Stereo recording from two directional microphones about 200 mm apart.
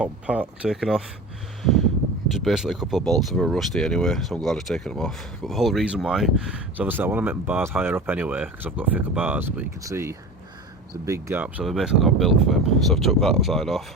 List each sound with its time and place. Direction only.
0.0 s speech: 5° right (ahead or behind)
1.6 s a sound: centre (ahead or behind)
2.3 s speech: centre (ahead or behind)